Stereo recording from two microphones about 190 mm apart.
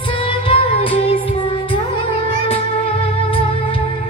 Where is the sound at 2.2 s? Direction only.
30° left (ahead or behind).